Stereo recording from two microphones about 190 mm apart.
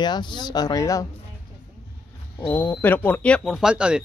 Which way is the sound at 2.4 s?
10° left (ahead or behind).